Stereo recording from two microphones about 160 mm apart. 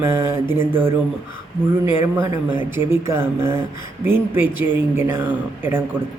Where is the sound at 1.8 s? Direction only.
15° right (ahead or behind).